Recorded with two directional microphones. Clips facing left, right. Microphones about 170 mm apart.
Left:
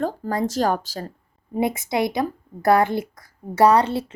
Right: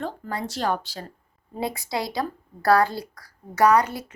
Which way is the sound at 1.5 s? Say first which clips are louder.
Left 6 dB; 20° left (ahead or behind).